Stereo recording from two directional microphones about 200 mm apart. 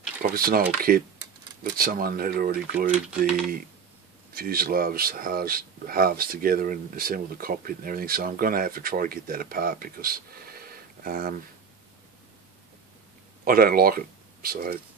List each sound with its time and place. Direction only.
0.2 s speech: 45° right (ahead or behind)
4.3 s speech: 45° right (ahead or behind)
13.4 s speech: 45° right (ahead or behind)